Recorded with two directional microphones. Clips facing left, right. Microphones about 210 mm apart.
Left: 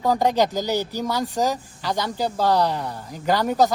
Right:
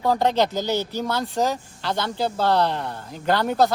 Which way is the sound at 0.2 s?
15° left (ahead or behind).